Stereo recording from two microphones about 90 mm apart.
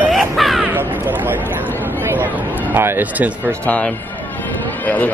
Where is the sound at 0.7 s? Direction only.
20° right (ahead or behind).